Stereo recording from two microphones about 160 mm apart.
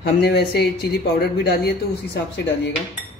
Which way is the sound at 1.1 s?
80° left.